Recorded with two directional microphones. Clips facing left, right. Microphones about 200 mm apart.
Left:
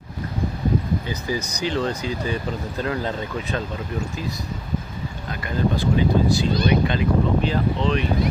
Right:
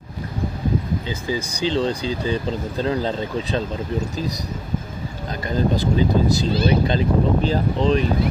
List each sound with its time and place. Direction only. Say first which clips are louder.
1.2 s speech: right 2 dB; 25° right (ahead or behind)
5.8 s speech: right 1 dB; 40° right (ahead or behind)